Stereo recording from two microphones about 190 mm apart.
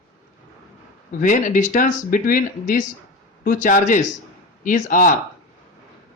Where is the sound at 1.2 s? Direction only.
40° left (ahead or behind).